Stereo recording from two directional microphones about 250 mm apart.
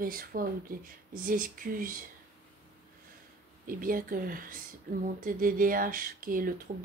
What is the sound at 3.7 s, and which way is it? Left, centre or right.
Speech, right.